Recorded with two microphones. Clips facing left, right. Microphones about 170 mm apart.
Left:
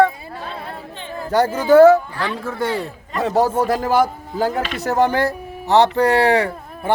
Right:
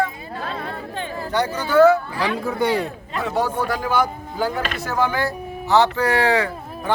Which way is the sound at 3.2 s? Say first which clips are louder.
Left 5 dB; 35° left (ahead or behind).